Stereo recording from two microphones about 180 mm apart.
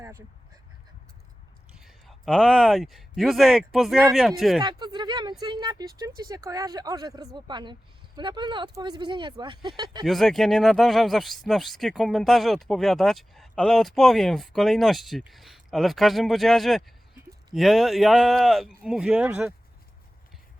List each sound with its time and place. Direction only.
1.7 s speech: centre (ahead or behind)
4.6 s speech: 25° right (ahead or behind)
10.1 s speech: centre (ahead or behind)